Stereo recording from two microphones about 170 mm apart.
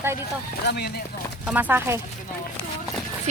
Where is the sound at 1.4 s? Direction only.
10° right (ahead or behind).